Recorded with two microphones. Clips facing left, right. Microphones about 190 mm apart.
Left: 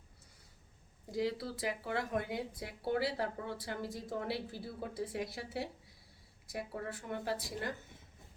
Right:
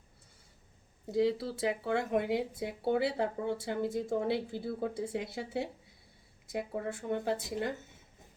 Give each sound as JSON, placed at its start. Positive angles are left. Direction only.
{"t": 1.0, "sound": "speech", "side_deg": -25}